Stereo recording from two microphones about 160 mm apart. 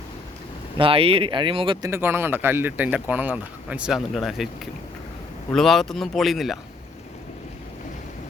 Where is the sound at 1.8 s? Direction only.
15° right (ahead or behind).